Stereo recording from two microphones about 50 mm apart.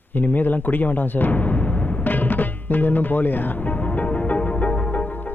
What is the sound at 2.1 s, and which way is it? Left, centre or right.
Speech, left.